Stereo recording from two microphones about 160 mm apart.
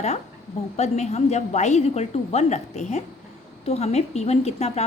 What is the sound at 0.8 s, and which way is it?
A woman's voice, 45° left (ahead or behind).